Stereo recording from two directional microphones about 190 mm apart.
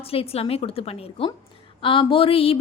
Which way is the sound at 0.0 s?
30° left (ahead or behind).